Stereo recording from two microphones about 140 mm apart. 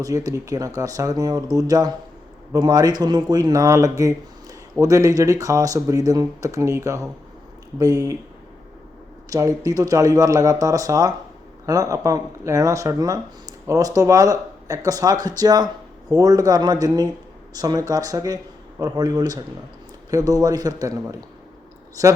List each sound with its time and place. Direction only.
0.0 s speech: 25° right (ahead or behind)
9.3 s speech: 25° right (ahead or behind)